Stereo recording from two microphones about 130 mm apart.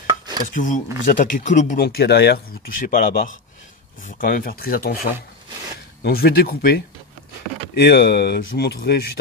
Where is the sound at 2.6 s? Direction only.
90° left.